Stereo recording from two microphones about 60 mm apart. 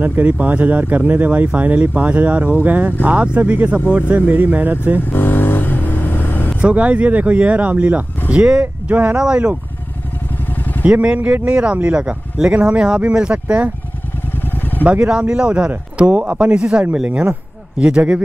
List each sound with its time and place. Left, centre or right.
0.0 s speech: right
5.0 s vehicle: left
6.6 s speech: right
10.4 s vehicle: left
10.8 s speech: right
14.3 s vehicle: left
14.9 s speech: centre